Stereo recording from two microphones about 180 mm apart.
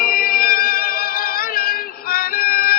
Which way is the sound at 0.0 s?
55° left (ahead or behind).